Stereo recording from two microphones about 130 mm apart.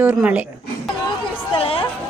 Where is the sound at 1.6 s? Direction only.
45° left (ahead or behind).